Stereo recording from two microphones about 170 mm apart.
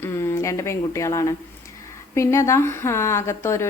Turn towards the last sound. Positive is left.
turn(degrees=15)  # may be behind; listen again after turning